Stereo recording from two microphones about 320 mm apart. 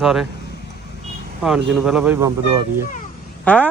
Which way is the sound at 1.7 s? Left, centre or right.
Centre.